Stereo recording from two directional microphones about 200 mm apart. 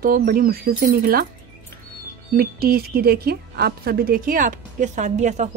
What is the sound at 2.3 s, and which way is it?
Speech, 50° right (ahead or behind).